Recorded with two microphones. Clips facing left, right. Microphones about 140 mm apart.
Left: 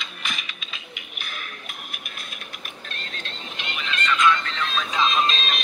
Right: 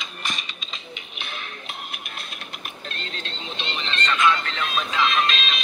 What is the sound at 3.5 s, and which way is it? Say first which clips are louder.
Vehicle: right 2 dB; 25° right (ahead or behind).